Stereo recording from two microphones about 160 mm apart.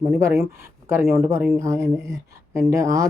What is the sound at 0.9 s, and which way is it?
Speech, 15° right (ahead or behind).